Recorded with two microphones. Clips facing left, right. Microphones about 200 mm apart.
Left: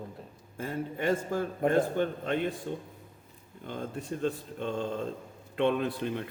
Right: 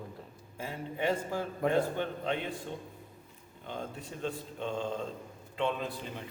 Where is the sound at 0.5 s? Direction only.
50° left (ahead or behind).